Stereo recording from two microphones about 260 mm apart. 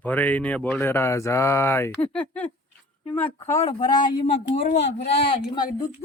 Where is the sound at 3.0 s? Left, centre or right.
Centre.